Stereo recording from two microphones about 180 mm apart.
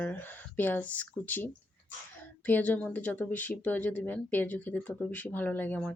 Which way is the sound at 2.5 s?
10° left (ahead or behind).